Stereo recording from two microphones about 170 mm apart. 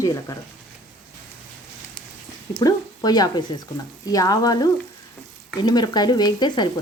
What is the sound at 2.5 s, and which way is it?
Speech, 25° left (ahead or behind).